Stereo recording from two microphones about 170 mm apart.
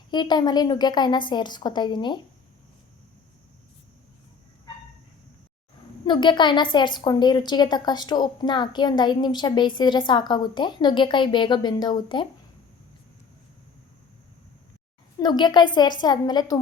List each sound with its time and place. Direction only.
0.1 s a woman's voice: 25° left (ahead or behind)
6.1 s a woman's voice: 25° left (ahead or behind)
15.2 s a woman's voice: 25° left (ahead or behind)